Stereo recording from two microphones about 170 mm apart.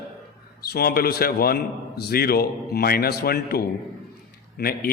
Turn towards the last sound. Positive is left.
turn(degrees=60)  # may be behind; listen again after turning